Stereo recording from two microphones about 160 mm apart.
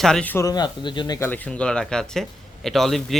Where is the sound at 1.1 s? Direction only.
10° left (ahead or behind).